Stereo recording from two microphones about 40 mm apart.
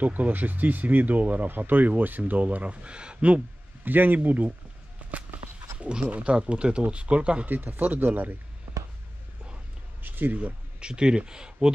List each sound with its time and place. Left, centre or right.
0.0 s speech: right
3.8 s speech: right
5.8 s a sound: right
6.0 s speech: right
7.4 s speech: right
10.0 s a sound: right
10.3 s speech: right
10.9 s speech: right